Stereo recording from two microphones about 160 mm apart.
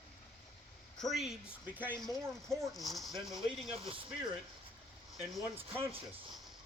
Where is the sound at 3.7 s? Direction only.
35° right (ahead or behind).